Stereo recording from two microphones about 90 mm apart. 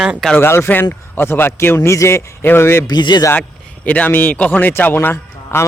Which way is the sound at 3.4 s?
15° left (ahead or behind).